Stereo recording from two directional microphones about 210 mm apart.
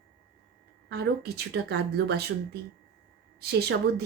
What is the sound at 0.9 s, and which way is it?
Speech, 50° right (ahead or behind).